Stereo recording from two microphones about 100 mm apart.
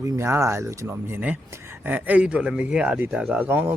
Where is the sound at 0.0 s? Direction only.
25° right (ahead or behind).